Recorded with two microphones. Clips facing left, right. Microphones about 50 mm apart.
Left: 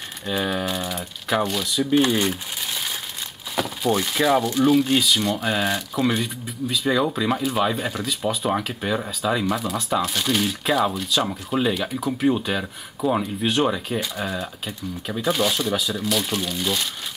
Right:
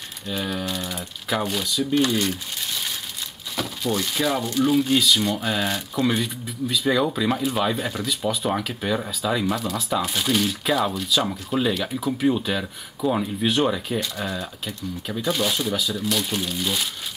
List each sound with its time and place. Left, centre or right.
0.3 s speech: left
0.7 s speech: centre
0.9 s speech: centre
2.0 s speech: left
3.5 s a sound: centre
4.1 s speech: centre
4.6 s speech: centre